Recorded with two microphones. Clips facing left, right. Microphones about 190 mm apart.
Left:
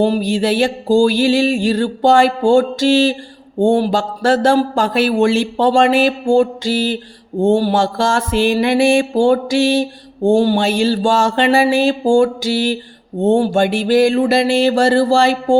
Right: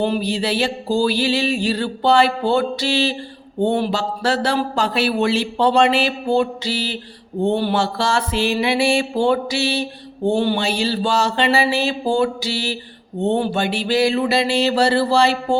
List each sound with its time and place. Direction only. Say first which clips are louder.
0.0 s mantra: left 5 dB; 45° left (ahead or behind)